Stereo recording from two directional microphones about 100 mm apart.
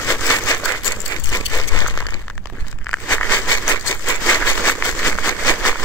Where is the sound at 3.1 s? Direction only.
20° left (ahead or behind).